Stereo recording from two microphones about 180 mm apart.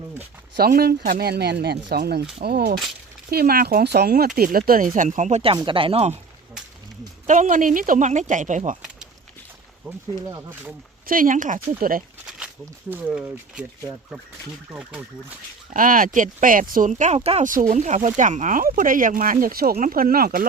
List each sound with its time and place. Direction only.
0.5 s speech: 60° right (ahead or behind); by 6.1 s 35° right (ahead or behind)
7.3 s speech: 45° right (ahead or behind)
10.2 s speech: 20° right (ahead or behind)
11.0 s speech: 50° right (ahead or behind)
12.9 s speech: 10° right (ahead or behind)
15.7 s speech: 50° right (ahead or behind)
17.5 s speech: 50° right (ahead or behind)